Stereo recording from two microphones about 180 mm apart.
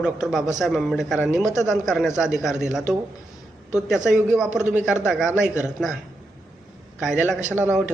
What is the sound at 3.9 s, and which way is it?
A man's voice, 5° right (ahead or behind).